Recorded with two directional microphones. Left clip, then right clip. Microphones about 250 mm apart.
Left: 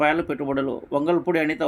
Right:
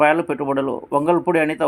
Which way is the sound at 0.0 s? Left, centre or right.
Centre.